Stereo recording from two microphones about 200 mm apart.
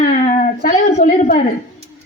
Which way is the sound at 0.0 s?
40° left (ahead or behind).